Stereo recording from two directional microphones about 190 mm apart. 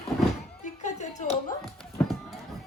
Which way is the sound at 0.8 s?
40° left (ahead or behind).